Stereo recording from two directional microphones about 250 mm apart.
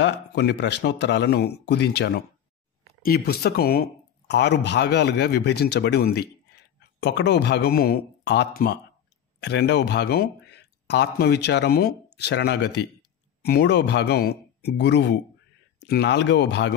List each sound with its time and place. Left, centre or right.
0.0 s a man's voice: left